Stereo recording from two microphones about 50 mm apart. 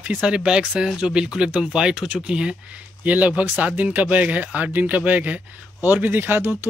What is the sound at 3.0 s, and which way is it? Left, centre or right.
Speech, right.